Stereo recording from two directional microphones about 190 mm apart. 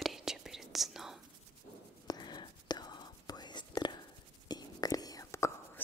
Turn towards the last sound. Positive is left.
turn(degrees=15)  # may be behind; listen again after turning